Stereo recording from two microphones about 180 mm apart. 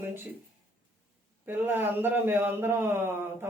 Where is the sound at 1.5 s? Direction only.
10° right (ahead or behind).